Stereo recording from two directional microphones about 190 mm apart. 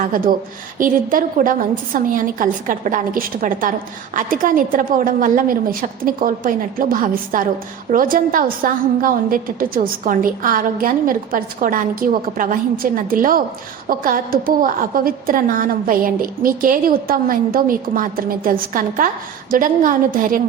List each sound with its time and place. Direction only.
0.0 s a woman's voice: 50° right (ahead or behind)